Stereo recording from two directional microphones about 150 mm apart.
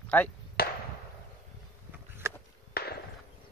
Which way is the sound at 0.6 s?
90° left.